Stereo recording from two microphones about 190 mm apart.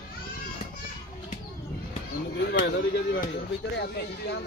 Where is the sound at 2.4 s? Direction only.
70° left (ahead or behind).